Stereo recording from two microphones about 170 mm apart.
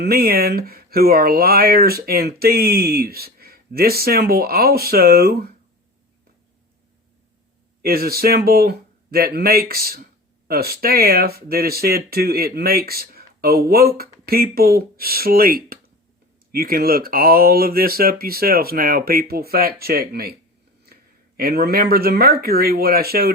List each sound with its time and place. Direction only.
0.0 s speech: 65° right (ahead or behind)
7.8 s speech: 65° right (ahead or behind)